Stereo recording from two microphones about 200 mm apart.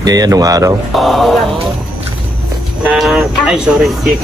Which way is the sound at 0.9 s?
Centre (ahead or behind).